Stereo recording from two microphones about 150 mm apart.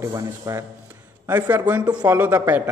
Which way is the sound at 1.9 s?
25° right (ahead or behind).